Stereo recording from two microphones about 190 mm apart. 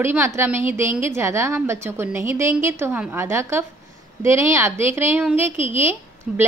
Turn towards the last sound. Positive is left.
turn(degrees=-10)  # may be behind; listen again after turning